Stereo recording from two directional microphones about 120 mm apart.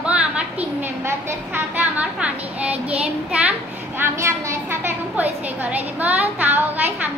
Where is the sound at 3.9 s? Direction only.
20° right (ahead or behind).